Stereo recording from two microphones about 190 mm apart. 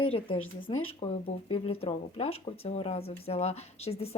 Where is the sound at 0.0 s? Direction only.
30° left (ahead or behind).